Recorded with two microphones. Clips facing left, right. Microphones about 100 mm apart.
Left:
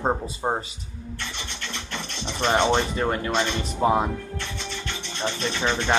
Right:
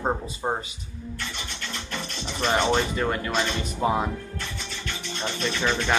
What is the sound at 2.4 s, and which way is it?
Speech, 25° left (ahead or behind).